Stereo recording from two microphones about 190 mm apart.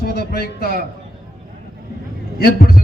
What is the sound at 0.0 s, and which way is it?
Speech, 55° left (ahead or behind).